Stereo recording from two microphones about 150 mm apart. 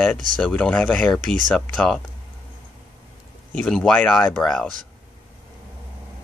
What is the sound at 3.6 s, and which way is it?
Speech, 5° left (ahead or behind).